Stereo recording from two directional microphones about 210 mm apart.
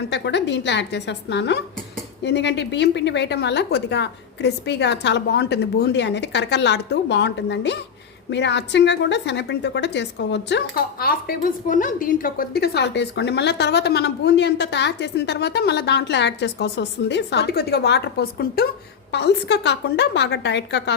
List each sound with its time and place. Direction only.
0.1 s a woman's voice: 55° left (ahead or behind)